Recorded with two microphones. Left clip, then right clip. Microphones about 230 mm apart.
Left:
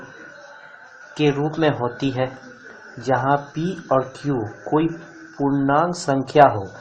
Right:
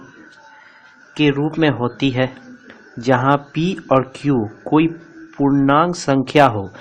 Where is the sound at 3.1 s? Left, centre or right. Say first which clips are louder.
Right 3 dB; right.